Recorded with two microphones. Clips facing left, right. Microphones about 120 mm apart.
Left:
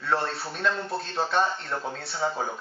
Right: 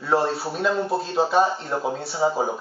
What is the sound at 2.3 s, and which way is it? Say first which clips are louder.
Speech: right 7 dB; 30° right (ahead or behind).